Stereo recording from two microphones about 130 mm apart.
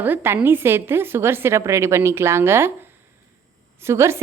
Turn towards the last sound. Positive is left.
turn(degrees=-20)  # may be behind; listen again after turning